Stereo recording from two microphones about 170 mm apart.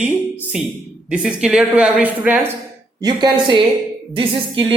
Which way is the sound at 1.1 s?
5° right (ahead or behind).